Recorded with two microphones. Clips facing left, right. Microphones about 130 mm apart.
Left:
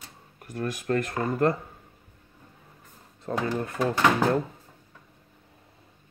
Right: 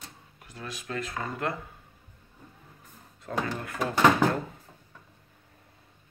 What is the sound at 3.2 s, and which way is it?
Speech, 30° left (ahead or behind).